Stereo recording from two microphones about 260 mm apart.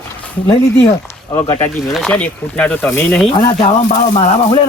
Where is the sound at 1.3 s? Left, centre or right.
Left.